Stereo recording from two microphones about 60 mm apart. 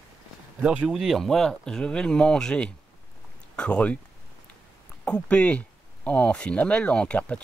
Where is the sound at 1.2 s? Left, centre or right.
Centre.